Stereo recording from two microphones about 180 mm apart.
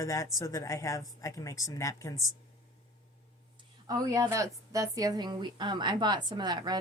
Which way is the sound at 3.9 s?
20° right (ahead or behind).